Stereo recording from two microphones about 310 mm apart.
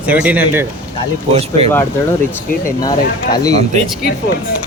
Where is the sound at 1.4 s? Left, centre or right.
Centre.